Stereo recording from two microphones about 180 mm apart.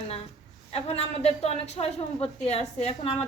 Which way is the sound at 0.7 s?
35° left (ahead or behind).